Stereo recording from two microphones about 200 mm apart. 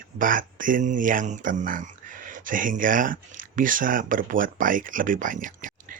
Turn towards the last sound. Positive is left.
turn(degrees=-40)  # may be behind; listen again after turning